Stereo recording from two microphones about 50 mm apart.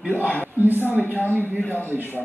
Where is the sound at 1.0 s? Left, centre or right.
Left.